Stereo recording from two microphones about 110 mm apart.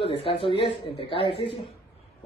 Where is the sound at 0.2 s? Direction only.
60° left (ahead or behind).